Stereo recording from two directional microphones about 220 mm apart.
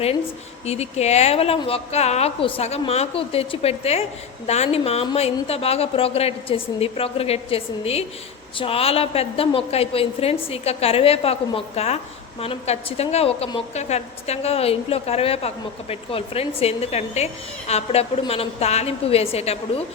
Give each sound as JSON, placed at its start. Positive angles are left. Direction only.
{"t": 0.6, "sound": "a woman's voice", "side_deg": 30}